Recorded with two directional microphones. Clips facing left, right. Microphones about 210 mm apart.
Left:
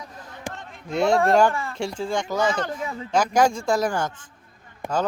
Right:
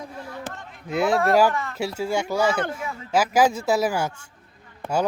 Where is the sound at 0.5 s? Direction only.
15° left (ahead or behind).